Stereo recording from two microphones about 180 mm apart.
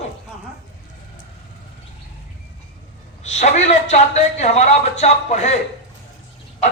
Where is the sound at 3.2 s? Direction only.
40° left (ahead or behind).